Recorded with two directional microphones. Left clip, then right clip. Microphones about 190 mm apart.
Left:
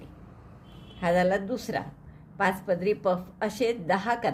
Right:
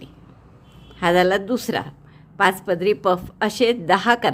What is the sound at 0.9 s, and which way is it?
Speech, 35° right (ahead or behind).